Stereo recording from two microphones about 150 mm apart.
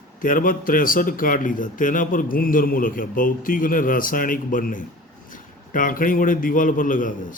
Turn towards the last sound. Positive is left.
turn(degrees=65)  # may be behind; listen again after turning